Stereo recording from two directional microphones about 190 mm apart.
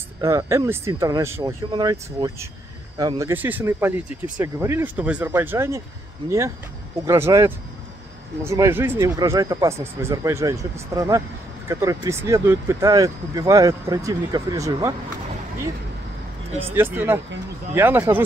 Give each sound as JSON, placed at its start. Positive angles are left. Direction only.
{"t": 0.2, "sound": "speech", "side_deg": -15}
{"t": 16.7, "sound": "speech", "side_deg": -10}